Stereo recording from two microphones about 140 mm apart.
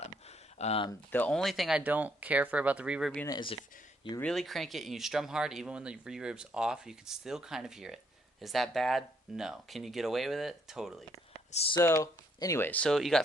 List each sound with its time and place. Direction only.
0.6 s speech: 45° left (ahead or behind)
1.1 s speech: 10° left (ahead or behind)
1.4 s speech: centre (ahead or behind)
1.8 s speech: 10° right (ahead or behind)
3.2 s speech: 35° left (ahead or behind)
4.2 s speech: 5° left (ahead or behind)
11.5 s speech: 45° left (ahead or behind)
11.8 s speech: 20° left (ahead or behind); by 13.2 s centre (ahead or behind)